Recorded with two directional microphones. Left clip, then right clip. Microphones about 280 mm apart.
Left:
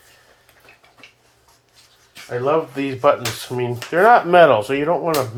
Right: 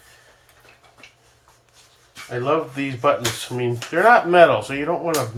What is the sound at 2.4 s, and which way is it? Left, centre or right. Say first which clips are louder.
Speech: left 2 dB; left.